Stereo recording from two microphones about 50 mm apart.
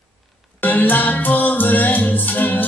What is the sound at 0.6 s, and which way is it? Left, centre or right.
Music, left.